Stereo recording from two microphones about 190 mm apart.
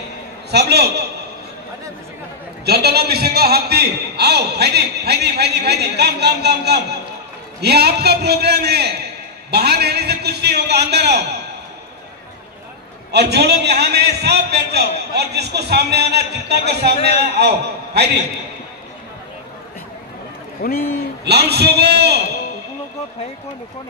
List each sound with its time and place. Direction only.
0.5 s a man's voice: 60° right (ahead or behind)
2.6 s a man's voice: 55° right (ahead or behind)
13.1 s a man's voice: 60° right (ahead or behind)
20.6 s a man's voice: 50° left (ahead or behind)
21.2 s a man's voice: 60° right (ahead or behind)